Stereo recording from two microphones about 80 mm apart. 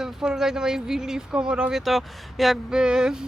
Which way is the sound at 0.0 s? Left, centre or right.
Centre.